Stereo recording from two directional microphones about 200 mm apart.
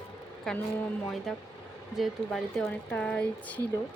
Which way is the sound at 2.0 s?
Centre (ahead or behind).